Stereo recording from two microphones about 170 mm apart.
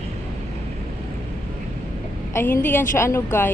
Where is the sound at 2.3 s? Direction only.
10° left (ahead or behind).